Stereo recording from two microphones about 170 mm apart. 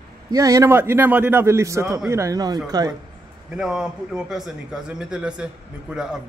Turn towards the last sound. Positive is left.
turn(degrees=-5)  # may be behind; listen again after turning